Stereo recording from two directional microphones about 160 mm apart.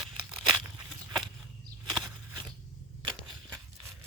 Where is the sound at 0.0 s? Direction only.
Centre (ahead or behind).